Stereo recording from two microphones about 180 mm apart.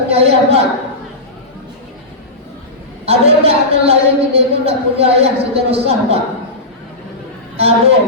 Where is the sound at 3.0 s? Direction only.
35° right (ahead or behind).